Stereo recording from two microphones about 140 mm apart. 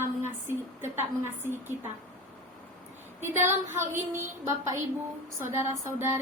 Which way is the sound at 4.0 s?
20° right (ahead or behind).